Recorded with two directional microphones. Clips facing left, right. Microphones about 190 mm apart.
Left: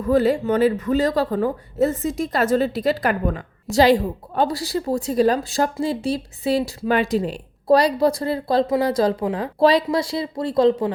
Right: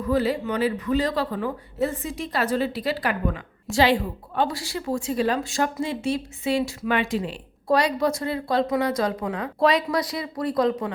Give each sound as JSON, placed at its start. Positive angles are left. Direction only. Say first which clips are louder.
{"t": 0.0, "sound": "a woman's voice", "louder": "left 5 dB", "side_deg": 45}